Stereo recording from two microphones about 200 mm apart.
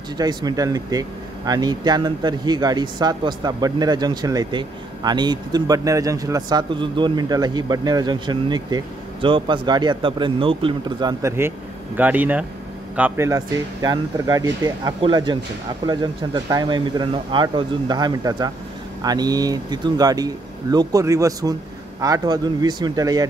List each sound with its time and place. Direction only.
0.2 s speech: 20° right (ahead or behind)